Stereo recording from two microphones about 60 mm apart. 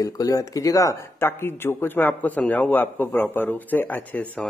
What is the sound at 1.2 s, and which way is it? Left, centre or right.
Speech, left.